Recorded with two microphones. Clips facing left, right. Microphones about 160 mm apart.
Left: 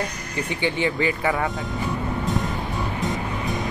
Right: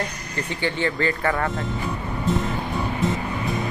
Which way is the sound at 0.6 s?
15° left (ahead or behind).